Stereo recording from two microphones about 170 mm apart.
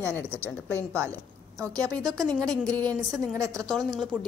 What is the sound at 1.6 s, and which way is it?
Speech, 20° right (ahead or behind).